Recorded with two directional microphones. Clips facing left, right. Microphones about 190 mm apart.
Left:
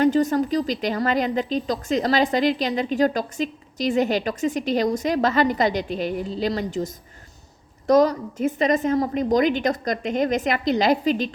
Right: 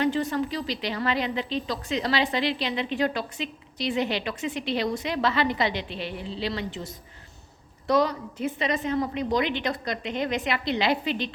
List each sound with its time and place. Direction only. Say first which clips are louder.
0.0 s a woman's voice: left 6 dB; 45° left (ahead or behind)